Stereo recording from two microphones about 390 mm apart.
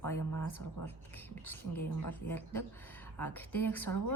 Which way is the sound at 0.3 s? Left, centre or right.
Left.